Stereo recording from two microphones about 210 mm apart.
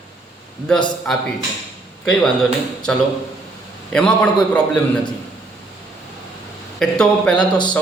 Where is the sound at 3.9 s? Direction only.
5° left (ahead or behind).